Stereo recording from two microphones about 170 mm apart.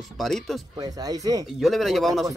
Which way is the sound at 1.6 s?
Centre (ahead or behind).